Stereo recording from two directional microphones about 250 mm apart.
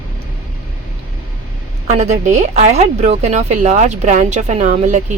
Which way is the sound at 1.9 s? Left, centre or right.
Right.